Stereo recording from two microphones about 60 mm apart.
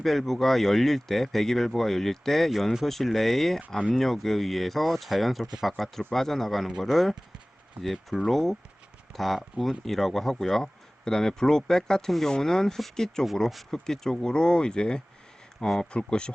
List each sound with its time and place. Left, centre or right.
0.0 s speech: centre
7.8 s speech: right
8.1 s speech: centre